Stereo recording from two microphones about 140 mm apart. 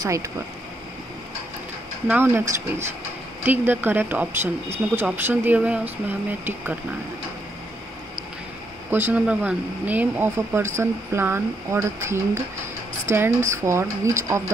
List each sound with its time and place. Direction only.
0.0 s speech: 20° right (ahead or behind)
2.0 s speech: 15° right (ahead or behind)
8.9 s speech: 10° right (ahead or behind)